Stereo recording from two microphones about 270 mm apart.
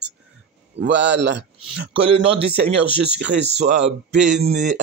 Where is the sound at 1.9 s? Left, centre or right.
Centre.